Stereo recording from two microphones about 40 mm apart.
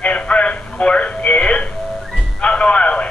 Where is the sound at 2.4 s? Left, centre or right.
Left.